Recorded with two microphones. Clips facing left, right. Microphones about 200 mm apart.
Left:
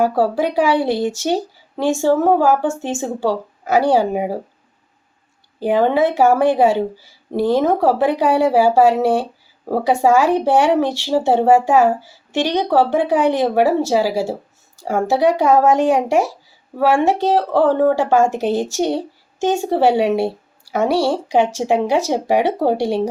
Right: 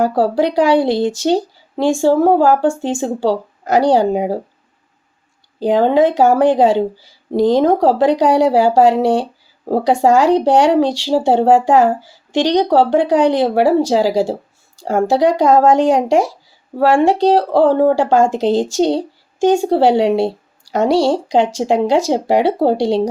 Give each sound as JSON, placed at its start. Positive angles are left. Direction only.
{"t": 0.0, "sound": "speech", "side_deg": -15}
{"t": 5.5, "sound": "speech", "side_deg": -15}
{"t": 18.9, "sound": "a sound", "side_deg": -15}
{"t": 20.1, "sound": "speech", "side_deg": -15}